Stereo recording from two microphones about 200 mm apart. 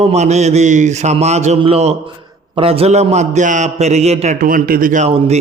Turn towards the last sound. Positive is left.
turn(degrees=-35)  # may be behind; listen again after turning